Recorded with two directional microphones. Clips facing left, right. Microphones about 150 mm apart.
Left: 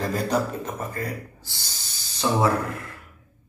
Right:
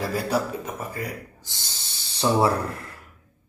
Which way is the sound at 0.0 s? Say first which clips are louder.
Left 1 dB; 5° right (ahead or behind).